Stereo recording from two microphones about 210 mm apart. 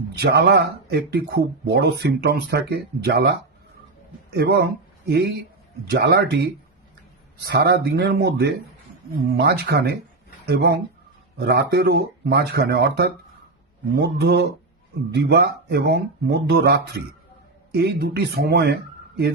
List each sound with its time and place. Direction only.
0.2 s speech: 50° right (ahead or behind)
4.4 s speech: 50° right (ahead or behind)